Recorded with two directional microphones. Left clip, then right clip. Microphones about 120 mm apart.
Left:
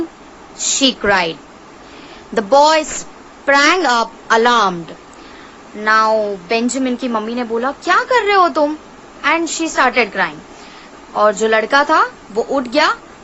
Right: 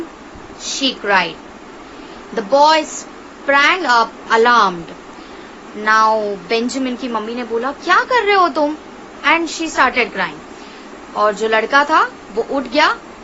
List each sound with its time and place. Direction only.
0.8 s a woman's voice: 60° left (ahead or behind)
2.3 s a woman's voice: 55° left (ahead or behind)
5.8 s a woman's voice: 35° left (ahead or behind)